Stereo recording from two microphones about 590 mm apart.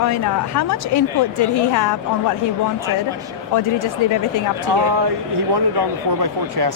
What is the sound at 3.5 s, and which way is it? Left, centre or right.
Speech, left.